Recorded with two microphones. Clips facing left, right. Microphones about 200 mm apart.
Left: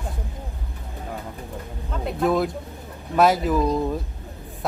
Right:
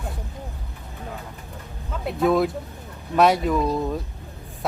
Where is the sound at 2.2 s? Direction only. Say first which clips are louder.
Right 2 dB; centre (ahead or behind).